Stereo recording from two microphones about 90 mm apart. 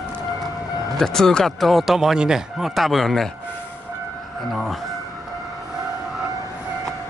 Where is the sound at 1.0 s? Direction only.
5° left (ahead or behind).